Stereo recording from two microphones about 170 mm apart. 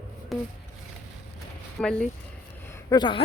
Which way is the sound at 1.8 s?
10° left (ahead or behind).